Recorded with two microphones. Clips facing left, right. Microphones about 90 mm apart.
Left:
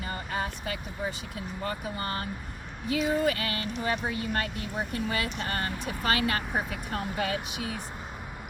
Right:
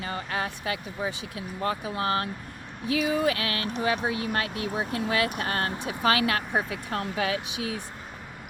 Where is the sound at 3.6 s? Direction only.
70° right (ahead or behind); by 5.7 s 90° right.